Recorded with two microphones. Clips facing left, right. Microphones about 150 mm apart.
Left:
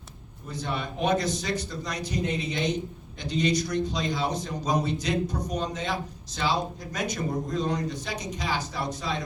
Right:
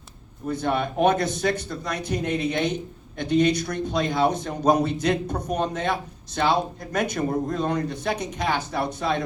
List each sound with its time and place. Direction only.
0.4 s speech: 55° right (ahead or behind)